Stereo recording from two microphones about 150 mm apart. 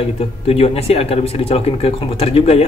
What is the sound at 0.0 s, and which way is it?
Speech, 40° left (ahead or behind).